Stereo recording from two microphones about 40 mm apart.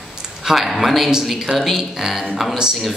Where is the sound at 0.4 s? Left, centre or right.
Centre.